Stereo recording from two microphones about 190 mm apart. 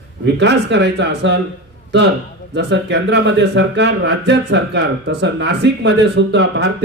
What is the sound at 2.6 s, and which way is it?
Speech, 65° right (ahead or behind).